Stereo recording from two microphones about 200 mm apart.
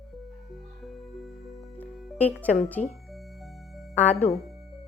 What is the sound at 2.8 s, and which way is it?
Speech, 40° left (ahead or behind).